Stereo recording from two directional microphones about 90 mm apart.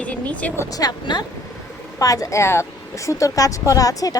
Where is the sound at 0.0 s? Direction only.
15° left (ahead or behind).